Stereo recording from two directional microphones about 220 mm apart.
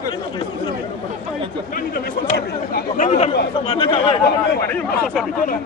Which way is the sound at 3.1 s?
30° left (ahead or behind).